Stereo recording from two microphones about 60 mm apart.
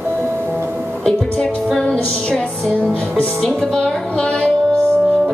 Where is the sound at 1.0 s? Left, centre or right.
Centre.